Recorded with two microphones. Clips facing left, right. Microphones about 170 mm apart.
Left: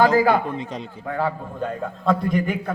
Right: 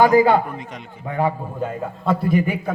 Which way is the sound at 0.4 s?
30° left (ahead or behind).